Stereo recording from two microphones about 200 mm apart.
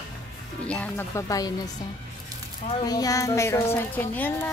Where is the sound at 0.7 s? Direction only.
5° left (ahead or behind).